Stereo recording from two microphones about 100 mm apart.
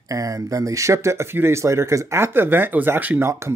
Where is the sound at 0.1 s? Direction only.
35° right (ahead or behind).